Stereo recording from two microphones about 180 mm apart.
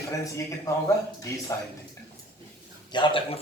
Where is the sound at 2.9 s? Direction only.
30° left (ahead or behind).